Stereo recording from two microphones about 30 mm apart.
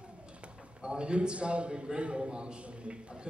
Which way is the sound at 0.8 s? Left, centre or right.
Right.